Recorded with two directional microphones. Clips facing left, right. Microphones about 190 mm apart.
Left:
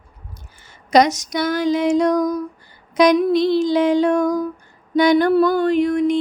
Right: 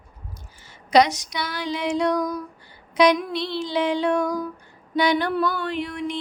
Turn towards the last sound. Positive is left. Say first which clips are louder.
# left 11 dB
turn(degrees=45)  # may be behind; listen again after turning